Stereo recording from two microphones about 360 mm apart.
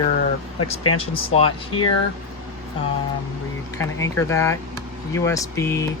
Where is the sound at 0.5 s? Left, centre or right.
Left.